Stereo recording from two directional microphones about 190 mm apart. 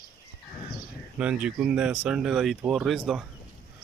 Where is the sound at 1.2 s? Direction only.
5° right (ahead or behind).